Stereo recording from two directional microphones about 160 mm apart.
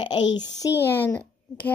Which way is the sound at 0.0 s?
25° left (ahead or behind).